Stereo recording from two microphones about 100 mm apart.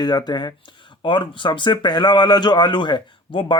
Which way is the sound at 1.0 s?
55° left (ahead or behind).